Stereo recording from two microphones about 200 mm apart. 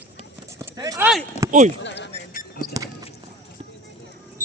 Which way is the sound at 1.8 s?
60° left (ahead or behind).